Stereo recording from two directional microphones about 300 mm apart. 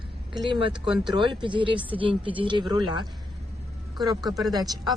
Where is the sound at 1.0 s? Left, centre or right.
Centre.